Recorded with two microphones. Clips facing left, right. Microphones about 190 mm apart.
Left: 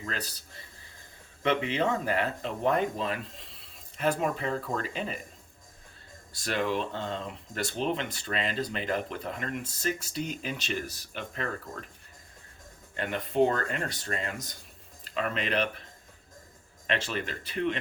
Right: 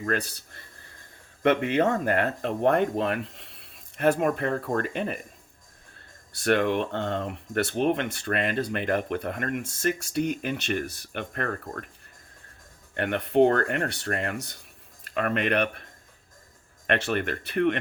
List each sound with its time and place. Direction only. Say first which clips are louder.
0.0 s speech: right 9 dB; 55° right (ahead or behind)
6.4 s speech: right 6 dB; 60° right (ahead or behind)
12.9 s speech: right 6 dB; 65° right (ahead or behind)
16.8 s speech: right 6 dB; 60° right (ahead or behind)